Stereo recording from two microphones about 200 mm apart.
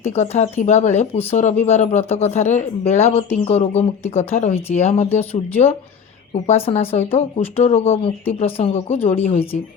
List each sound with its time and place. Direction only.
0.6 s speech: 35° left (ahead or behind)